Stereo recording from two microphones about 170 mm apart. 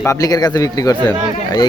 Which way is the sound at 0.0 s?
20° left (ahead or behind).